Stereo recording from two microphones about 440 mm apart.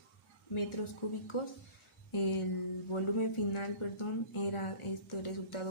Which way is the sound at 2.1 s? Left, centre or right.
Left.